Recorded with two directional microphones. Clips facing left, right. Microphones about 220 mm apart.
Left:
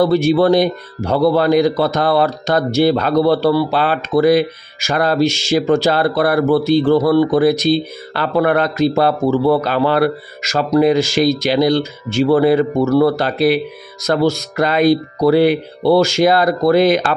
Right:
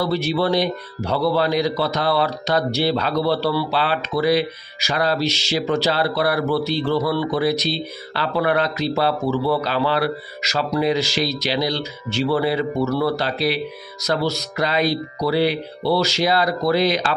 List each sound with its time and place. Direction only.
0.0 s a man's voice: 50° left (ahead or behind)